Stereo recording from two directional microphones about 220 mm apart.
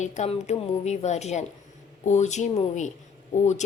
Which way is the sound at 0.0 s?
30° left (ahead or behind).